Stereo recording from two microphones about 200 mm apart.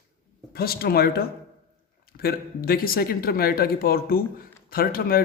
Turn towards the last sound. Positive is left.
turn(degrees=45)  # may be behind; listen again after turning